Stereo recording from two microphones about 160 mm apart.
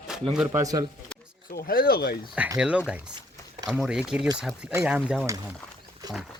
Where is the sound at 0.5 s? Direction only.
20° right (ahead or behind).